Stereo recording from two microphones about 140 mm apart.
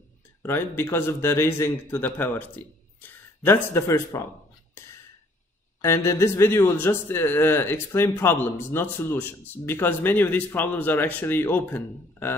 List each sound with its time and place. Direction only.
0.4 s speech: 15° left (ahead or behind)
5.8 s speech: 20° left (ahead or behind)